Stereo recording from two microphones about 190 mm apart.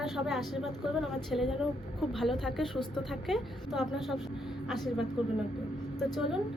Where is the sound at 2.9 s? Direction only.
Centre (ahead or behind).